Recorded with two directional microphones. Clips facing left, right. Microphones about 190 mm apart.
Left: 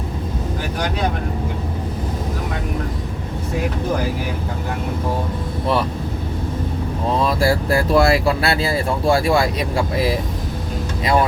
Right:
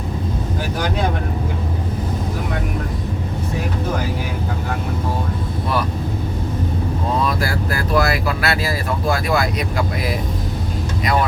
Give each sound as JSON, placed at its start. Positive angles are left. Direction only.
{"t": 7.3, "sound": "speech", "side_deg": 30}